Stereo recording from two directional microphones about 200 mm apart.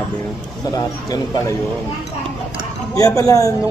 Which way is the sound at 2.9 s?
15° left (ahead or behind).